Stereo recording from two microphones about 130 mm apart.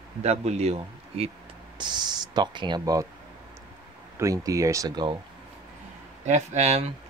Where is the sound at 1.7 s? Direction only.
35° right (ahead or behind).